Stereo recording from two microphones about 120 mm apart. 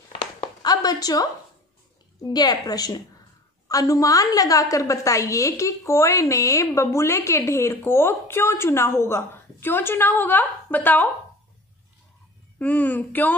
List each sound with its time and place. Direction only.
0.2 s a sound: 35° left (ahead or behind)
2.2 s a woman's voice: 35° left (ahead or behind); by 11.1 s 15° left (ahead or behind)
12.5 s speech: 15° left (ahead or behind)